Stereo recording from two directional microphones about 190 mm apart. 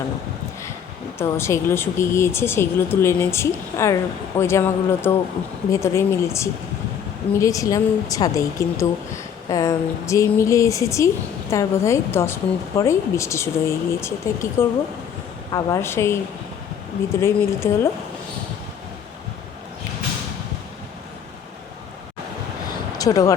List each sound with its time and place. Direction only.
1.2 s a woman's voice: 15° left (ahead or behind)
17.2 s a woman's voice: 15° left (ahead or behind)
23.0 s speech: 20° left (ahead or behind)